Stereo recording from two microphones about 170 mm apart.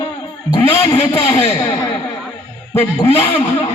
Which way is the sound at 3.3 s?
30° left (ahead or behind).